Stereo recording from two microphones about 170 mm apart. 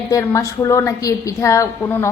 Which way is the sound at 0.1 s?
20° left (ahead or behind).